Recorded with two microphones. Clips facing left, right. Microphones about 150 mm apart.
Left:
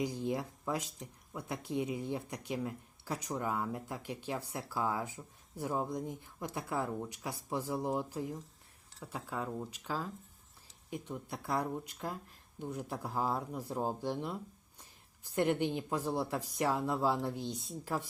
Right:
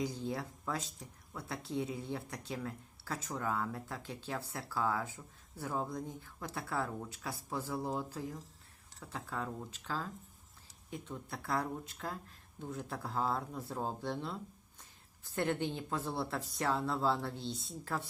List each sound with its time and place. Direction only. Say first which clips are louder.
0.0 s speech: left 3 dB; 15° left (ahead or behind)